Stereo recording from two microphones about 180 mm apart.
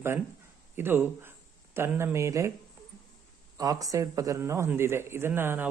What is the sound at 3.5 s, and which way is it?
Speech, 20° right (ahead or behind).